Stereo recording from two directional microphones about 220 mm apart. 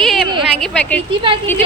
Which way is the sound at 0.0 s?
Centre (ahead or behind).